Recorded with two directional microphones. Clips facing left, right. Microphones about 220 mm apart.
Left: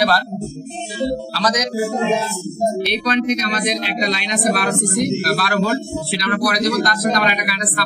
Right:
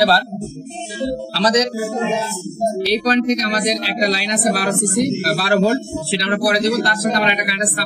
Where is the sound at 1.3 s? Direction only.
30° right (ahead or behind).